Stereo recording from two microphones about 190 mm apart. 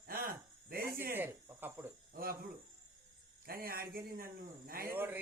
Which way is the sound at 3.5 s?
50° right (ahead or behind).